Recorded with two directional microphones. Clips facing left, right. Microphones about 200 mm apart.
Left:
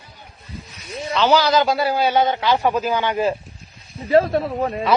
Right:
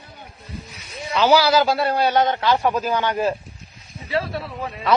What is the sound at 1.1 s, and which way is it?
A man's voice, 10° right (ahead or behind).